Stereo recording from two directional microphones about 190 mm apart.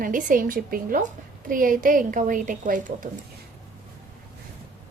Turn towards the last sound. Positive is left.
turn(degrees=-40)  # may be behind; listen again after turning